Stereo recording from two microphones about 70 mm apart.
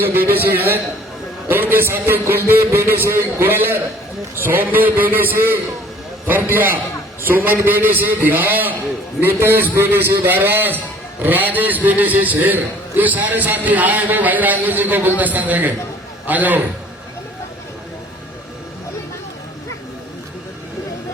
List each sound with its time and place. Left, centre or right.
0.1 s a man's voice: right
1.5 s a man's voice: right